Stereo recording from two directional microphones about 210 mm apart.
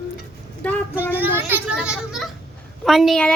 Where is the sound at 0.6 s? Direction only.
10° left (ahead or behind).